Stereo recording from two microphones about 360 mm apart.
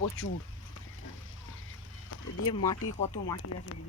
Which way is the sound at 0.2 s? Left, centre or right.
Left.